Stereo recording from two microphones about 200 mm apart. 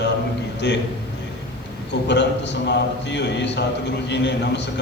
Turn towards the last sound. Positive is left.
turn(degrees=60)  # may be behind; listen again after turning